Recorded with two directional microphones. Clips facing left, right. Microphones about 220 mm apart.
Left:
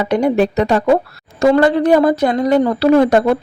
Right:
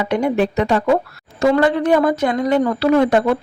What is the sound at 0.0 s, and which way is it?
Speech, 40° left (ahead or behind).